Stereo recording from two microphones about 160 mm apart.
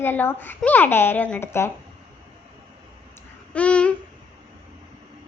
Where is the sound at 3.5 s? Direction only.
10° left (ahead or behind).